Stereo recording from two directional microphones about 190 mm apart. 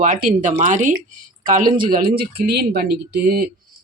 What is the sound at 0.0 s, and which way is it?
Speech, 40° right (ahead or behind).